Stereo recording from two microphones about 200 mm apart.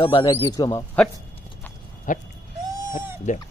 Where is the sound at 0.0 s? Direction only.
25° left (ahead or behind).